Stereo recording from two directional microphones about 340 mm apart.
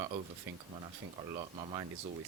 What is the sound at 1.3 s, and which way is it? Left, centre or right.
Speech, centre.